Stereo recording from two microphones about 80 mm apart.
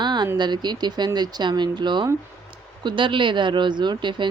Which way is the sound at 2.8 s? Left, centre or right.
Right.